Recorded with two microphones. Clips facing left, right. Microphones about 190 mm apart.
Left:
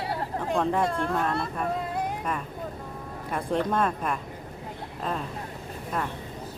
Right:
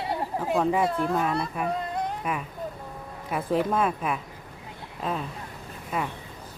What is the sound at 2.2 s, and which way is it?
Speech, 5° right (ahead or behind).